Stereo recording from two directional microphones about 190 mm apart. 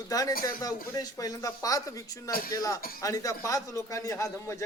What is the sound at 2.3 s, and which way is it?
Speech, 50° left (ahead or behind).